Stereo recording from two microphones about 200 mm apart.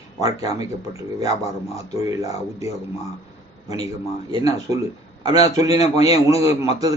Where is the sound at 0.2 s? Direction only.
20° right (ahead or behind).